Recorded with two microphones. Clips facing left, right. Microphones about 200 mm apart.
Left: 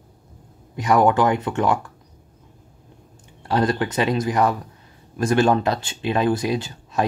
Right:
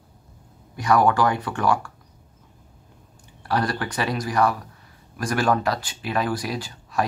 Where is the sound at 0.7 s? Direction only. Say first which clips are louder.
Left 2 dB; 20° left (ahead or behind).